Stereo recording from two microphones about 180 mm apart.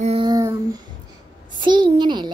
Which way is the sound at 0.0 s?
35° right (ahead or behind).